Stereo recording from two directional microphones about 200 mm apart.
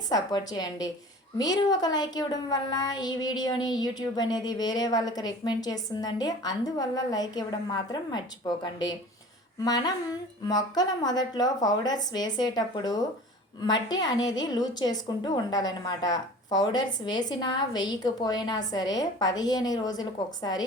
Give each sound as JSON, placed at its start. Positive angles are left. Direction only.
{"t": 0.1, "sound": "speech", "side_deg": 20}